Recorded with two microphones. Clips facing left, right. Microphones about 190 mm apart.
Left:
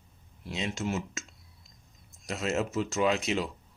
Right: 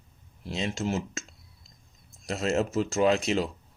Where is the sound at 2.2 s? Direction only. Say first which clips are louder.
Right 3 dB; 35° right (ahead or behind).